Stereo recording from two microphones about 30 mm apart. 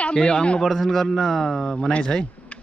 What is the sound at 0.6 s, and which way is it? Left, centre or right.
A man's voice, centre.